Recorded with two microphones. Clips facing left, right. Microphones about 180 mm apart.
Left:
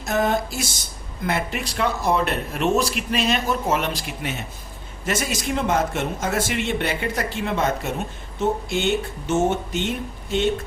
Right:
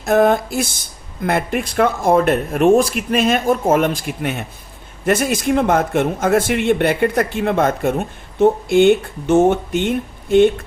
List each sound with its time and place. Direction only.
0.0 s a man's voice: 55° right (ahead or behind)